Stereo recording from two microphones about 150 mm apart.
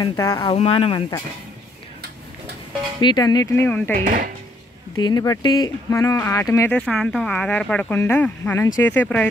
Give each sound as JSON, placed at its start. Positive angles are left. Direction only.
{"t": 0.1, "sound": "speech", "side_deg": 20}
{"t": 0.6, "sound": "speech", "side_deg": 40}
{"t": 3.0, "sound": "speech", "side_deg": 30}
{"t": 3.6, "sound": "speech", "side_deg": 15}
{"t": 4.0, "sound": "dishes", "side_deg": -65}
{"t": 5.0, "sound": "speech", "side_deg": 25}
{"t": 6.7, "sound": "speech", "side_deg": 5}